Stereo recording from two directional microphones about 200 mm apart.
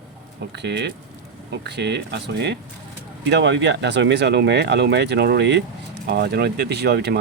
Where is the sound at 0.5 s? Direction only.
55° right (ahead or behind).